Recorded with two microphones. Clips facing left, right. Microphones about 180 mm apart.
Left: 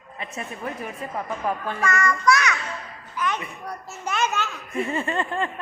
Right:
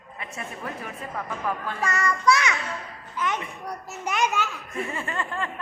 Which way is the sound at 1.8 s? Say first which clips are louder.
Left 1 dB; 30° right (ahead or behind).